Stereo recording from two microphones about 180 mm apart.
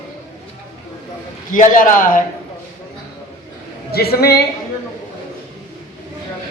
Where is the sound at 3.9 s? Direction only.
60° left (ahead or behind).